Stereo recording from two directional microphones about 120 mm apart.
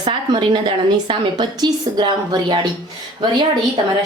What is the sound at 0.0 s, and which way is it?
A woman's voice, 45° right (ahead or behind).